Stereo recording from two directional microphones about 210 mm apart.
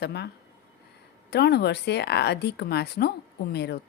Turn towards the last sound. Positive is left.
turn(degrees=50)  # may be behind; listen again after turning